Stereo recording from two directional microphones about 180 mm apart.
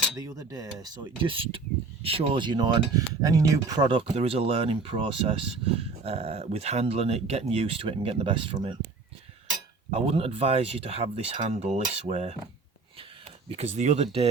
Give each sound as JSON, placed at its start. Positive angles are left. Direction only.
{"t": 0.2, "sound": "speech", "side_deg": -20}
{"t": 9.9, "sound": "speech", "side_deg": -35}
{"t": 13.5, "sound": "speech", "side_deg": -35}